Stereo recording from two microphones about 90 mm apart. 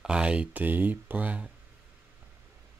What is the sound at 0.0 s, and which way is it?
Speech, 10° right (ahead or behind).